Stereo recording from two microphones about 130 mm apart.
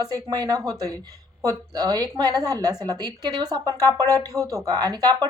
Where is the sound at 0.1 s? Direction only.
30° right (ahead or behind).